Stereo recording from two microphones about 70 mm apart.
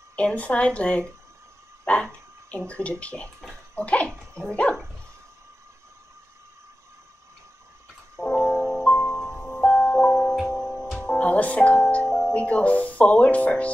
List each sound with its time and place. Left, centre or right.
0.1 s speech: left
2.5 s speech: centre
8.2 s music: centre
9.6 s music: left
11.1 s speech: left